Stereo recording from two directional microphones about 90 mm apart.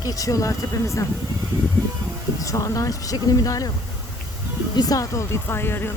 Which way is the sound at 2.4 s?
35° left (ahead or behind).